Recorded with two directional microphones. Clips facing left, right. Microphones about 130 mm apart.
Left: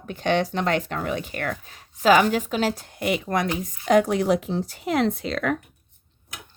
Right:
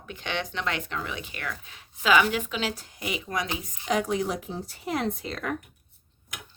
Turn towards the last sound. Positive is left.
turn(degrees=85)